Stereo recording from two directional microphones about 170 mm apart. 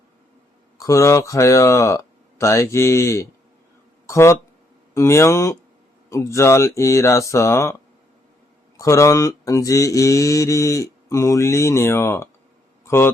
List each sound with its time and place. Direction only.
0.8 s mantra: 20° left (ahead or behind)
4.0 s speech: 15° left (ahead or behind)
4.9 s mantra: 15° left (ahead or behind)
8.8 s mantra: 20° left (ahead or behind)